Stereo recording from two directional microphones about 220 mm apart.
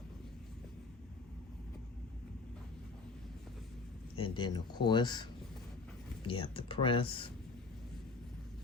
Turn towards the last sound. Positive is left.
turn(degrees=25)  # may be behind; listen again after turning